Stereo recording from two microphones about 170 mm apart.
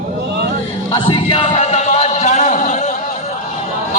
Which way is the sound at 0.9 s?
30° left (ahead or behind).